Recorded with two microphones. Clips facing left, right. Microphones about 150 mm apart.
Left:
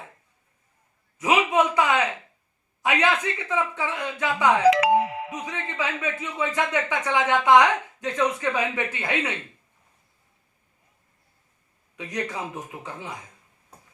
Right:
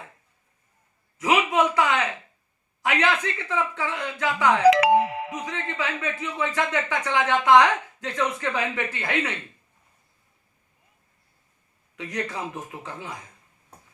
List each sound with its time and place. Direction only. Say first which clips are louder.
1.2 s a man's voice: even; 15° left (ahead or behind)
4.7 s music: right 1 dB; 80° right
5.5 s speech: left 2 dB; 15° left (ahead or behind)
11.9 s speech: even; 15° left (ahead or behind)